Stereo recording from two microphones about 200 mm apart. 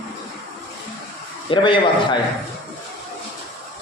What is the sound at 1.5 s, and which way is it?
Speech, 25° left (ahead or behind).